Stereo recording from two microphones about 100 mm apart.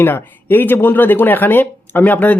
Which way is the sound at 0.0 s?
20° left (ahead or behind).